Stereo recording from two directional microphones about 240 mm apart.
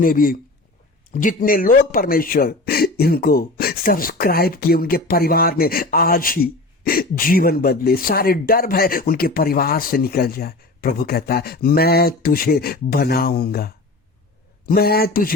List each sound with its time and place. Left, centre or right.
0.0 s a man's voice: left